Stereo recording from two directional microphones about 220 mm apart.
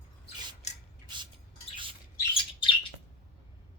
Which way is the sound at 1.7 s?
25° right (ahead or behind).